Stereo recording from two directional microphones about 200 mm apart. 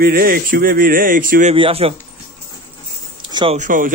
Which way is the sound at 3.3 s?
20° right (ahead or behind).